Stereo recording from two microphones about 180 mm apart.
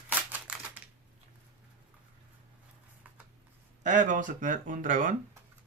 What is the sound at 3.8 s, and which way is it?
Speech, 45° right (ahead or behind).